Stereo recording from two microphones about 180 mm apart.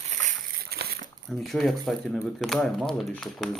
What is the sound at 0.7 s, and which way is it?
Crumpling, 60° right (ahead or behind).